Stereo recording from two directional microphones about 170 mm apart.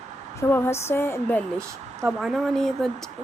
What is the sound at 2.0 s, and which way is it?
Speech, centre (ahead or behind).